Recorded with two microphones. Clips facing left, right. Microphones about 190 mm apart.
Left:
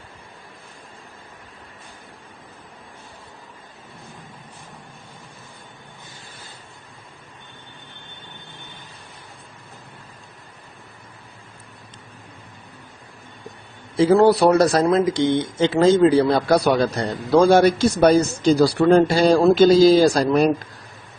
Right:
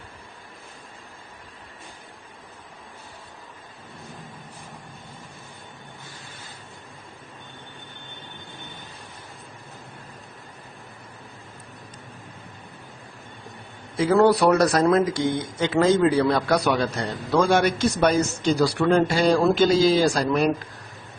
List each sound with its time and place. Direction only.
14.0 s speech: 30° left (ahead or behind)